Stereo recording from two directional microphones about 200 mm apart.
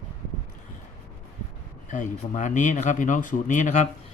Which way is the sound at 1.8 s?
40° left (ahead or behind).